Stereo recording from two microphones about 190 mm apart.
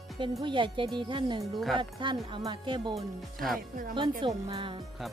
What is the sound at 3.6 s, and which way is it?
Speech, 50° right (ahead or behind).